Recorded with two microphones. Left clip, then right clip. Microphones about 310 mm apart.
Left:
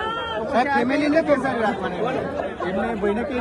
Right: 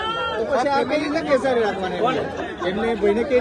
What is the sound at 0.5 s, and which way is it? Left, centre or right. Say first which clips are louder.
Speech: left 1 dB; left.